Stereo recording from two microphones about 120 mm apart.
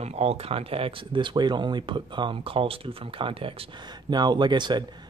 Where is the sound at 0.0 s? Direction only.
55° right (ahead or behind).